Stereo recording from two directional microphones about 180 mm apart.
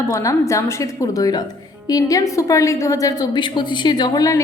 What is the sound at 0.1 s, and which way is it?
A woman's voice, 15° left (ahead or behind).